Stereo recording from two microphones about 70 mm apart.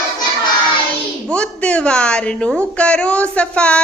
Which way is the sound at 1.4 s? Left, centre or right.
Centre.